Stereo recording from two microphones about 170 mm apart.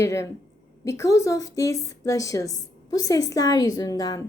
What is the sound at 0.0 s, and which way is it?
A woman's voice, 15° left (ahead or behind).